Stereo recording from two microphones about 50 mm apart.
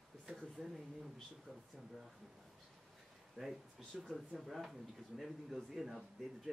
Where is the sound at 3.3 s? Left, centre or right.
Centre.